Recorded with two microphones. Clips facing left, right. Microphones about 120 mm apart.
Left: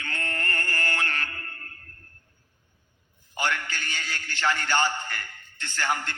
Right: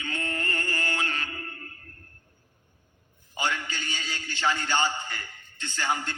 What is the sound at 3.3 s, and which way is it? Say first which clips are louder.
A man's voice: left 1 dB; 15° right (ahead or behind).